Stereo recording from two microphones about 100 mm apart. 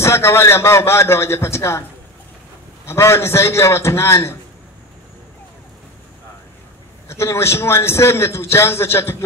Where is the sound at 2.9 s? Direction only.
25° left (ahead or behind).